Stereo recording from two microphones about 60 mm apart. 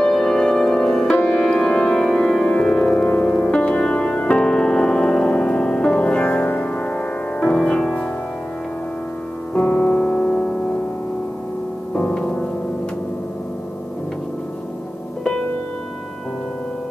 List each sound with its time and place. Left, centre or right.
0.0 s music: centre
9.5 s music: left
12.1 s music: centre